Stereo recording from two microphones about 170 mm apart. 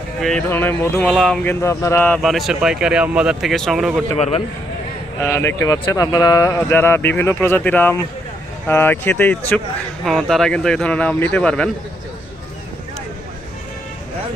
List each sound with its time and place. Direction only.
0.2 s speech: 5° left (ahead or behind)
1.1 s speech: centre (ahead or behind)
1.5 s speech: 15° left (ahead or behind); by 4.0 s centre (ahead or behind)
4.2 s speech: 35° left (ahead or behind)
5.2 s speech: 15° left (ahead or behind)